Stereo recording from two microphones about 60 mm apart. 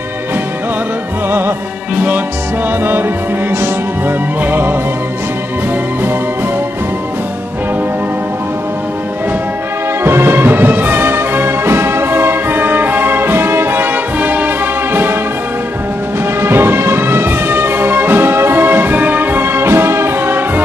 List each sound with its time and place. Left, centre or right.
2.8 s music: right
4.5 s music: right
10.0 s music: right
16.3 s music: right